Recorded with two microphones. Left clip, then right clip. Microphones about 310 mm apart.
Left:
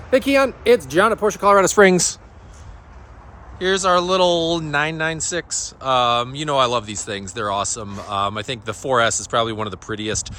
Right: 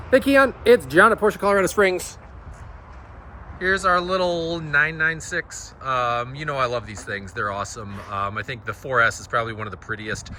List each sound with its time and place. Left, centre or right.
0.1 s speech: centre
1.7 s speech: left
3.6 s speech: centre